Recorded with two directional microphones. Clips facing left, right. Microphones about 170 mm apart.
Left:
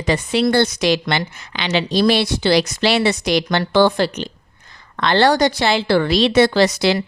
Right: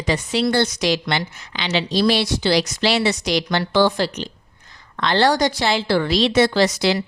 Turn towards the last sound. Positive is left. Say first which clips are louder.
# left 2 dB
turn(degrees=60)  # may be behind; listen again after turning